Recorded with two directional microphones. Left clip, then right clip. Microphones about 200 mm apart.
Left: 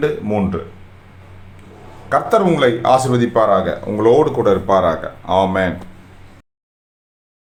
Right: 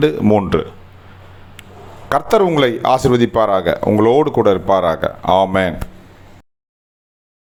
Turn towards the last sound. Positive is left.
turn(degrees=-40)  # may be behind; listen again after turning